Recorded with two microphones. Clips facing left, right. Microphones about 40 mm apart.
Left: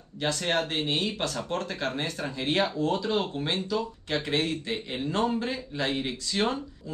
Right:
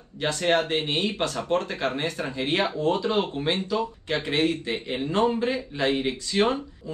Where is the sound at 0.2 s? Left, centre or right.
Centre.